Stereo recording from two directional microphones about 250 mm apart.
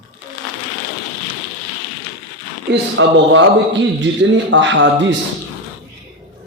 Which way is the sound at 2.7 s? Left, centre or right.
Right.